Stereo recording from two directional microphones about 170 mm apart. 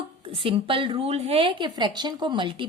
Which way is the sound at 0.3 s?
30° right (ahead or behind).